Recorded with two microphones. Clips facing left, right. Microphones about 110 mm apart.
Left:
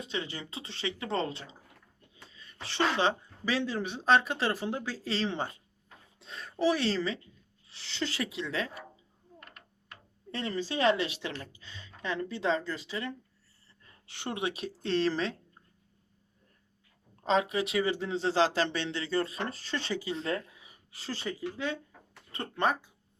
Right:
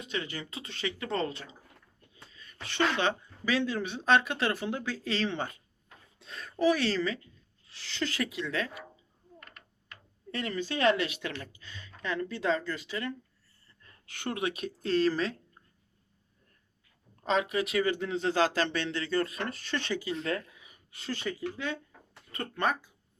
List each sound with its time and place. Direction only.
0.1 s speech: 25° left (ahead or behind)
2.5 s a sound: 30° left (ahead or behind)
3.0 s speech: 35° left (ahead or behind)
10.3 s speech: 30° left (ahead or behind)
11.8 s a sound: 25° left (ahead or behind)
12.4 s speech: 30° left (ahead or behind)
17.2 s speech: 25° left (ahead or behind)